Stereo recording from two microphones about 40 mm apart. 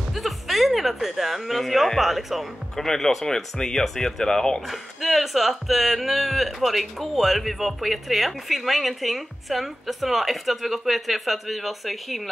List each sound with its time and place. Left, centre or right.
0.1 s speech: centre
2.7 s speech: centre
4.6 s speech: centre